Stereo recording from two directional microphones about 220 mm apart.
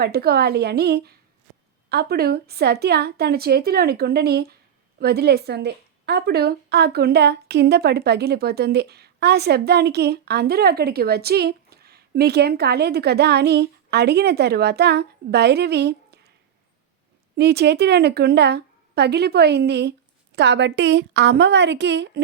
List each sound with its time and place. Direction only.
0.0 s a woman's voice: 45° right (ahead or behind)
17.3 s a woman's voice: 50° right (ahead or behind)